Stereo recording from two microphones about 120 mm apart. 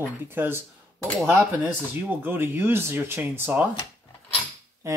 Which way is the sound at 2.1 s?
15° right (ahead or behind).